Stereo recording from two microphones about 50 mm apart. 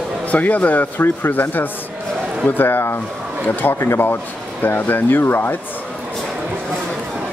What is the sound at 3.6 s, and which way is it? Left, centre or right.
Speech, left.